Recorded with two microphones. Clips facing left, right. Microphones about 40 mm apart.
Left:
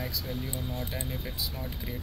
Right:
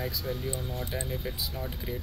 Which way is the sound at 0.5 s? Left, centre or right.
Left.